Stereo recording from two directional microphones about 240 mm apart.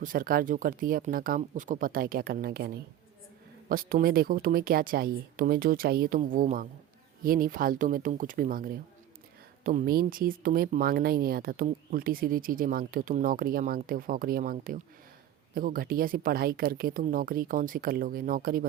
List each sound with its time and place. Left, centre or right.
0.0 s speech: right